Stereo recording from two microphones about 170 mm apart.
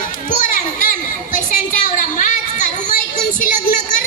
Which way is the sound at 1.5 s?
50° left (ahead or behind).